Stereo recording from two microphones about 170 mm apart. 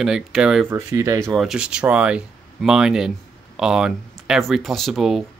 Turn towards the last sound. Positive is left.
turn(degrees=0)  # may be behind; listen again after turning